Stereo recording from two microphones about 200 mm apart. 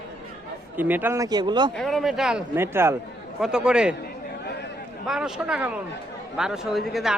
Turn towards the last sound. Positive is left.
turn(degrees=0)  # may be behind; listen again after turning